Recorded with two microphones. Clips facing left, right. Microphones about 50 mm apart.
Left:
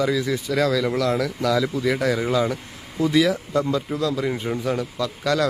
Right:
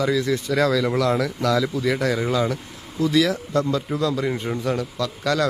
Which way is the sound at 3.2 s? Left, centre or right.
Centre.